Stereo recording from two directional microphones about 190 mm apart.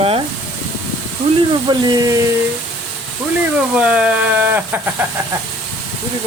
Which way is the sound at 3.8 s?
5° right (ahead or behind).